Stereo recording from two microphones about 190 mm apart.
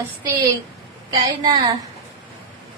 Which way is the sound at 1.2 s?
20° right (ahead or behind).